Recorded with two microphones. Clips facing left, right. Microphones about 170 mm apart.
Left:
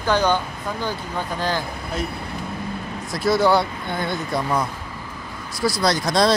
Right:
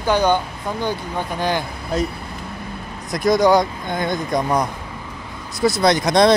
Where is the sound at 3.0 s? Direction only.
15° right (ahead or behind).